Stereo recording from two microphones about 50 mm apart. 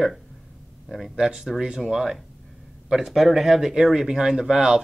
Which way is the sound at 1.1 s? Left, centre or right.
Centre.